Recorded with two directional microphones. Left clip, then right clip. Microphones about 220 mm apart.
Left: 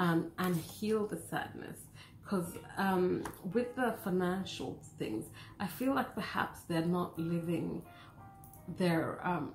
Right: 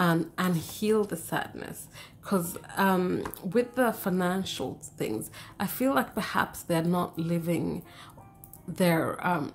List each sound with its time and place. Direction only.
0.0 s speech: 50° right (ahead or behind)
8.7 s speech: 50° right (ahead or behind)